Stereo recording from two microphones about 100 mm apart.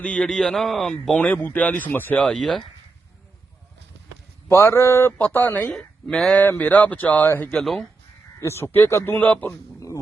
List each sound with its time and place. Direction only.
0.0 s speech: 15° left (ahead or behind)
0.3 s speech: centre (ahead or behind)
1.1 s speech: 15° left (ahead or behind)
2.2 s speech: 5° left (ahead or behind)
4.4 s a man's voice: 25° left (ahead or behind)
5.6 s speech: 5° left (ahead or behind)
7.6 s speech: centre (ahead or behind)
8.4 s a man's voice: 25° left (ahead or behind)